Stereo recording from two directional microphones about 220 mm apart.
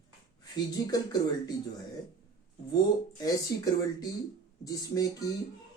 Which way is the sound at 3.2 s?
15° left (ahead or behind).